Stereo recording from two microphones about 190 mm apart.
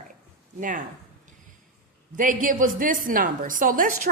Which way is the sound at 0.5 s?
45° right (ahead or behind).